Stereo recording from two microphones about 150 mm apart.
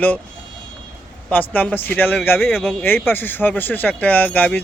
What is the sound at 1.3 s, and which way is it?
Speech, 10° left (ahead or behind).